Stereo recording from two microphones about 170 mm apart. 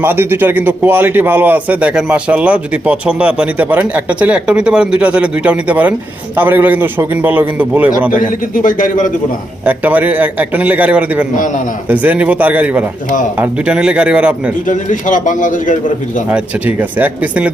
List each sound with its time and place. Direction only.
0.0 s a man's voice: 10° right (ahead or behind)
8.1 s a man's voice: 55° left (ahead or behind)
9.6 s a man's voice: 10° right (ahead or behind)
14.7 s a man's voice: 50° left (ahead or behind)
16.3 s a man's voice: 10° right (ahead or behind)